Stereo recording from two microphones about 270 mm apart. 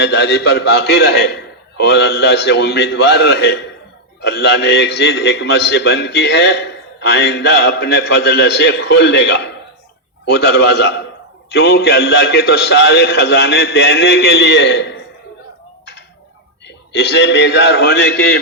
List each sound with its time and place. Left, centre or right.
0.0 s a man's voice: left
16.6 s a man's voice: left